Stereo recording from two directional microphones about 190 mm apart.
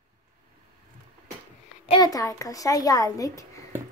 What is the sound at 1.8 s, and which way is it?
A child's voice, 20° left (ahead or behind).